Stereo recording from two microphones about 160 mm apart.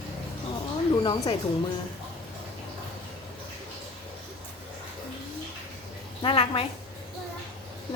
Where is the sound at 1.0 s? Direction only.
30° left (ahead or behind).